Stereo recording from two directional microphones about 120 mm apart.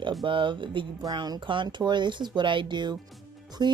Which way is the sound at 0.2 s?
45° right (ahead or behind).